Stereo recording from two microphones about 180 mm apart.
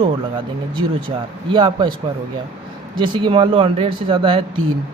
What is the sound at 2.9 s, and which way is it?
Speech, 25° right (ahead or behind).